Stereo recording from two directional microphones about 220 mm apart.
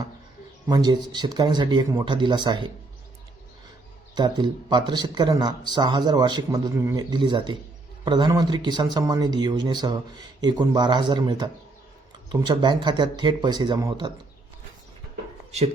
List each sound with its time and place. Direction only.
0.7 s speech: 20° right (ahead or behind)
4.1 s speech: 20° right (ahead or behind)